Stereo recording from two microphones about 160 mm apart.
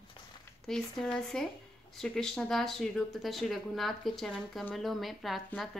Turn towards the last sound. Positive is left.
turn(degrees=0)  # may be behind; listen again after turning